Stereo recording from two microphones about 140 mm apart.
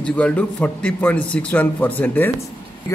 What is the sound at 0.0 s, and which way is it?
A man's voice, 10° left (ahead or behind).